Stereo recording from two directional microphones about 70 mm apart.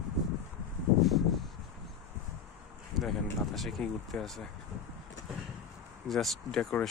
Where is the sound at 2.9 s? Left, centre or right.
Centre.